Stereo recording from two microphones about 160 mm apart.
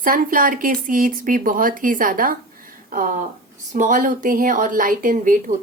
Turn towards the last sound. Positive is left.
turn(degrees=-50)  # may be behind; listen again after turning